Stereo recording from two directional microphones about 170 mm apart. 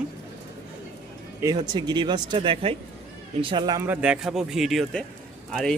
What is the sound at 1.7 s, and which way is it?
Speech, 25° right (ahead or behind).